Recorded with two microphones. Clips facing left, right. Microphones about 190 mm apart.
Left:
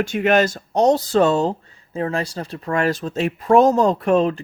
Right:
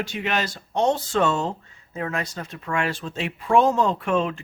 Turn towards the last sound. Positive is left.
turn(degrees=40)  # may be behind; listen again after turning